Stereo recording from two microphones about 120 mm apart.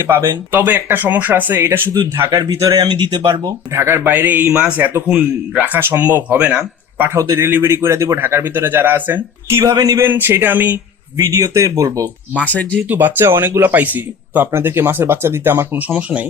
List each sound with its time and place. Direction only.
0.0 s speech: 20° right (ahead or behind)
3.8 s speech: 20° right (ahead or behind)
7.1 s speech: 25° right (ahead or behind)
9.6 s speech: 35° right (ahead or behind)
10.0 s speech: 20° right (ahead or behind)
11.2 s speech: 30° right (ahead or behind)
12.7 s speech: 15° right (ahead or behind)